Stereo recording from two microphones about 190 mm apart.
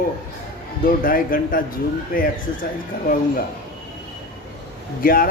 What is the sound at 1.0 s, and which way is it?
Speech, 50° left (ahead or behind).